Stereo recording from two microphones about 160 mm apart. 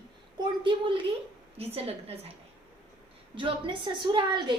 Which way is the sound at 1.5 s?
40° right (ahead or behind).